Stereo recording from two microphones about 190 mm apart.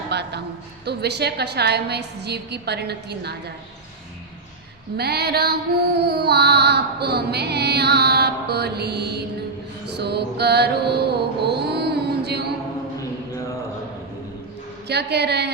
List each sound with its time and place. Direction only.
0.1 s a sound: 60° right (ahead or behind)
0.9 s music: 60° right (ahead or behind)
4.9 s music: 60° right (ahead or behind)
9.8 s mantra: 60° right (ahead or behind)
14.8 s music: 60° right (ahead or behind)